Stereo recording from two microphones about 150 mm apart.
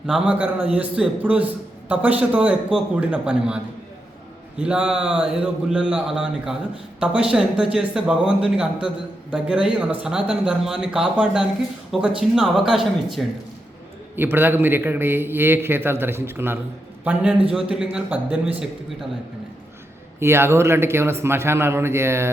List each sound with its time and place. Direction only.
0.1 s a man's voice: 10° right (ahead or behind)
4.6 s speech: 5° right (ahead or behind)
14.2 s a man's voice: 15° right (ahead or behind)
20.1 s a man's voice: 15° right (ahead or behind)